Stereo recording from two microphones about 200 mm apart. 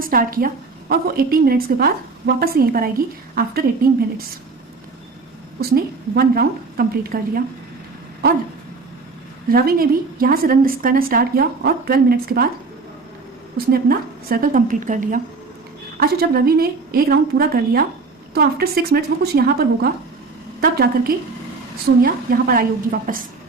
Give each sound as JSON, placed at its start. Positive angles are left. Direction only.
{"t": 0.0, "sound": "a woman's voice", "side_deg": -45}
{"t": 5.5, "sound": "a woman's voice", "side_deg": -50}
{"t": 9.5, "sound": "a woman's voice", "side_deg": -50}
{"t": 13.7, "sound": "a woman's voice", "side_deg": -50}